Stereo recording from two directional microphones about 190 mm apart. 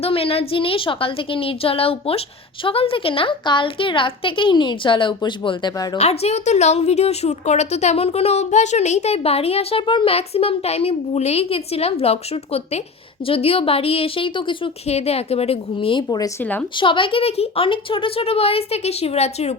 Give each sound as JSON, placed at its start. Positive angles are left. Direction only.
{"t": 0.0, "sound": "a woman's voice", "side_deg": 30}
{"t": 6.0, "sound": "a woman's voice", "side_deg": 35}
{"t": 16.0, "sound": "speech", "side_deg": 15}
{"t": 16.7, "sound": "a woman's voice", "side_deg": 25}